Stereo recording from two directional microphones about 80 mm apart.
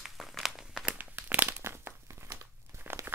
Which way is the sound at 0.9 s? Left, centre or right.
Right.